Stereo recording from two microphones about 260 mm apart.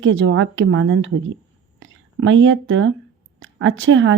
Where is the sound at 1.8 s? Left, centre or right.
Right.